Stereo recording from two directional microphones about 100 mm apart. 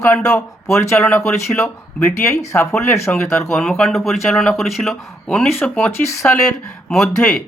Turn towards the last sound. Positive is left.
turn(degrees=10)  # may be behind; listen again after turning